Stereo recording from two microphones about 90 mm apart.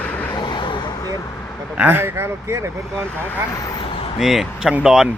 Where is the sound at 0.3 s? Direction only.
60° left (ahead or behind).